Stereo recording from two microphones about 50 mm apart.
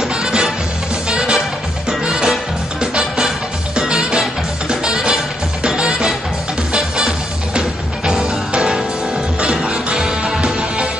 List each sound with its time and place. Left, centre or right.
0.0 s music: centre
1.9 s music: centre
7.5 s music: centre